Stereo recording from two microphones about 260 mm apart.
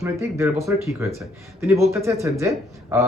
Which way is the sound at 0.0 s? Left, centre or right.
Centre.